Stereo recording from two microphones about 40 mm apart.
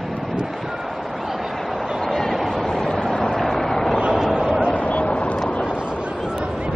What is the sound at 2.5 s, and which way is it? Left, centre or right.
Vehicle, centre.